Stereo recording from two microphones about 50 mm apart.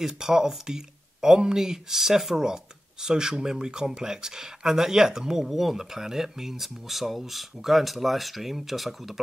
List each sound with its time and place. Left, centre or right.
0.0 s speech: centre